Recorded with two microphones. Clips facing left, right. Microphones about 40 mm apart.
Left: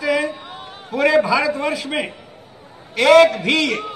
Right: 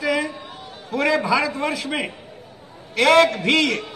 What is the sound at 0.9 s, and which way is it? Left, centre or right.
A man's voice, centre.